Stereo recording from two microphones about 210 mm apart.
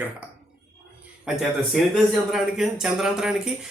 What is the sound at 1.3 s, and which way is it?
Speech, 5° right (ahead or behind).